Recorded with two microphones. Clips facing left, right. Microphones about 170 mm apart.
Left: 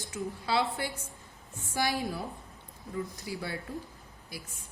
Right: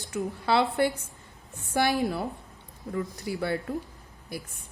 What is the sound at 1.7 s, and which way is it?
Speech, 60° right (ahead or behind).